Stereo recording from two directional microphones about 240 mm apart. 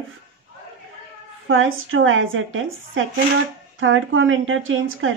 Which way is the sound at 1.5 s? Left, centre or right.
Right.